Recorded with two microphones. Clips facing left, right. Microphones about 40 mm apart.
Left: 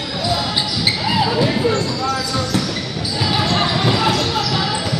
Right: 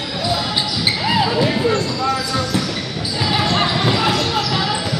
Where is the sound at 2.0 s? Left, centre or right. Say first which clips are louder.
Right 1 dB; centre.